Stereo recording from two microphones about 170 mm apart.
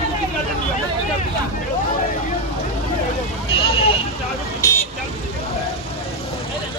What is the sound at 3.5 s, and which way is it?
Vehicle, 35° left (ahead or behind).